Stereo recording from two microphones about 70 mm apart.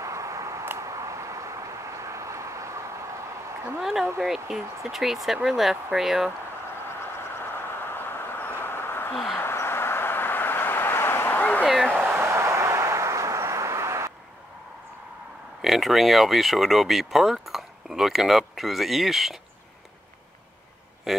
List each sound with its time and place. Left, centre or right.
0.0 s a sound: right
4.2 s speech: centre
7.2 s vehicle: left
9.1 s speech: centre
9.4 s vehicle: left
11.6 s a sound: centre
12.1 s vehicle: right
15.6 s speech: centre
21.1 s speech: centre